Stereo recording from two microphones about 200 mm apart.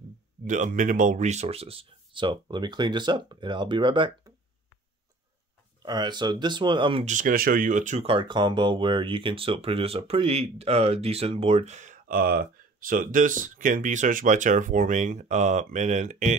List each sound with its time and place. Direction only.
0.5 s speech: 40° right (ahead or behind); by 4.3 s 25° right (ahead or behind)
5.8 s speech: 20° right (ahead or behind); by 16.3 s 35° right (ahead or behind)